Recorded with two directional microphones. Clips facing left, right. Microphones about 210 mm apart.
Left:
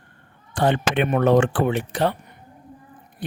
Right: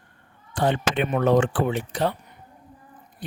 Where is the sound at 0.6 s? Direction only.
65° left (ahead or behind).